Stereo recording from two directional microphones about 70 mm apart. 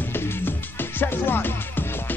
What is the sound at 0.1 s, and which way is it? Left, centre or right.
Music, left.